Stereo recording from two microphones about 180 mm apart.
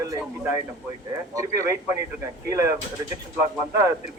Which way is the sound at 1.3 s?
15° right (ahead or behind).